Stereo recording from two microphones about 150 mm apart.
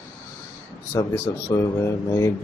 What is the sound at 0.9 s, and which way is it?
Speech, 20° left (ahead or behind).